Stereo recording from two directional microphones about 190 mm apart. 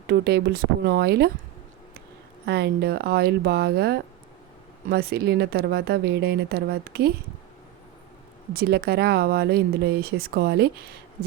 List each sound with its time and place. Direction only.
0.1 s speech: 55° right (ahead or behind)
2.5 s speech: 60° right (ahead or behind)
8.5 s speech: 55° right (ahead or behind)